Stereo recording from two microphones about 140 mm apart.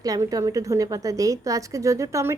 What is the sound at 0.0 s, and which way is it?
A woman's voice, 25° right (ahead or behind).